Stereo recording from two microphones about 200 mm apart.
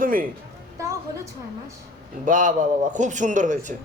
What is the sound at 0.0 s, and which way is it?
Speech, 45° right (ahead or behind).